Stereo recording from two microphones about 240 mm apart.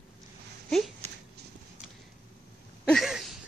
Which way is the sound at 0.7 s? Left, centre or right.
Centre.